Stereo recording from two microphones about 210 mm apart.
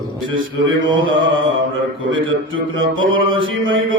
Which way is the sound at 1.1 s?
65° right (ahead or behind).